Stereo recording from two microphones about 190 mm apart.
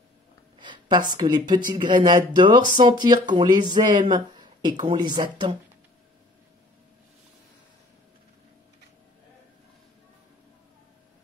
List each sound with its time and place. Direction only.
0.6 s speech: 25° right (ahead or behind)